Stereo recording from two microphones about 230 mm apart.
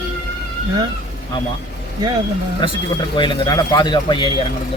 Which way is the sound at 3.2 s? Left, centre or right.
Left.